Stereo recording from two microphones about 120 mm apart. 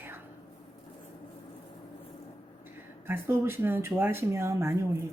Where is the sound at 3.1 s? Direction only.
20° right (ahead or behind).